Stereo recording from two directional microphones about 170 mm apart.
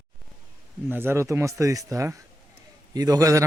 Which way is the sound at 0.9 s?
15° right (ahead or behind).